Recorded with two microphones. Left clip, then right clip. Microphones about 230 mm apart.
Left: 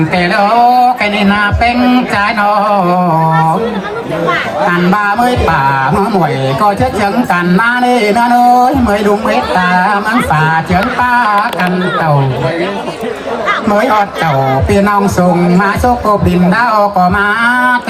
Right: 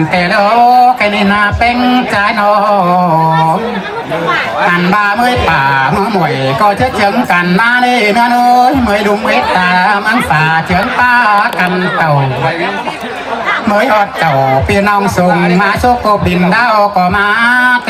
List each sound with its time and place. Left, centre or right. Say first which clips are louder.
0.2 s music: right 1 dB; right
4.7 s a man's voice: right 1 dB; right
11.0 s a sound: right 3 dB; right
13.7 s a man's voice: right 1 dB; right